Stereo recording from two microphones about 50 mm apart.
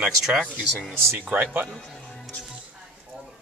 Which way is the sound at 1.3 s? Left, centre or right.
Right.